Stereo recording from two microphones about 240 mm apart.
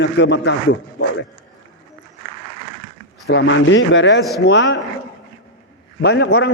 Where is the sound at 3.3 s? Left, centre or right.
Left.